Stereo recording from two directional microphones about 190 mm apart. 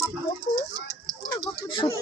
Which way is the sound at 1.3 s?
25° left (ahead or behind).